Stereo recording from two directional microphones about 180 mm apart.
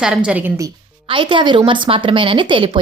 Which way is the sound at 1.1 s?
25° right (ahead or behind).